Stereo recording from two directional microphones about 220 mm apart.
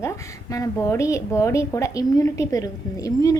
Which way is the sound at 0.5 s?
15° left (ahead or behind).